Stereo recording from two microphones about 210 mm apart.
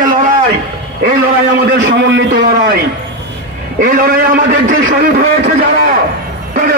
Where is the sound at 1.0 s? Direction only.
45° right (ahead or behind).